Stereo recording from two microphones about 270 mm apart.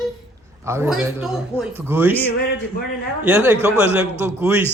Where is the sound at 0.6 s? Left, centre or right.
Centre.